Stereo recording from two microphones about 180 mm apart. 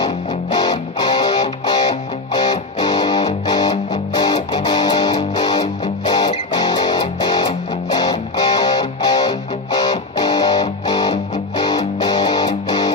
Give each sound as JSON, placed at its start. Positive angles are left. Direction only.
{"t": 0.5, "sound": "music", "side_deg": 20}